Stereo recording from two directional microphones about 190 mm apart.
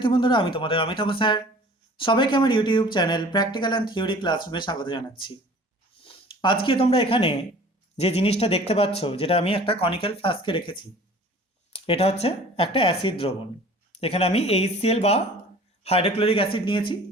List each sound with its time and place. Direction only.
0.0 s speech: 25° left (ahead or behind)